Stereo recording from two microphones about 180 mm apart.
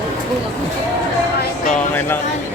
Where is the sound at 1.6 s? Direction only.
10° left (ahead or behind).